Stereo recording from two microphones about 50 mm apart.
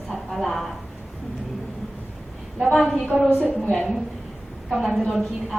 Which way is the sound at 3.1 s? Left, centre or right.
Centre.